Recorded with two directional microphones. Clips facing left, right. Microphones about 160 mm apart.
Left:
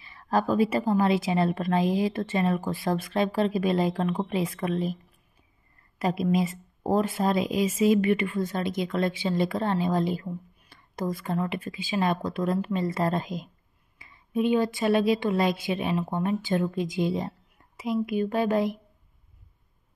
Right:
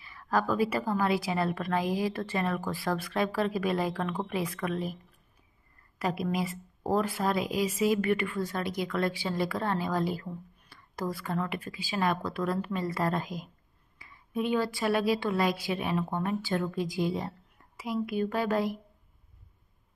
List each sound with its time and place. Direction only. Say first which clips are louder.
0.0 s speech: left 3 dB; 25° left (ahead or behind)
5.9 s speech: left 5 dB; 25° left (ahead or behind)